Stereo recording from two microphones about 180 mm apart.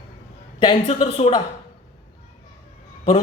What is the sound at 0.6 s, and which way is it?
Speech, 30° left (ahead or behind).